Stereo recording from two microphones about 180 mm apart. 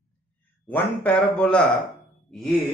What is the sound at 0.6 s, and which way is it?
Speech, 10° left (ahead or behind).